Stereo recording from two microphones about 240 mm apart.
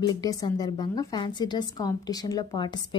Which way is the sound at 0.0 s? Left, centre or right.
Centre.